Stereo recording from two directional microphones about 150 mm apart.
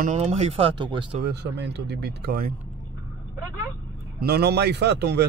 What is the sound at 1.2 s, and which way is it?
A man's voice, 90° right.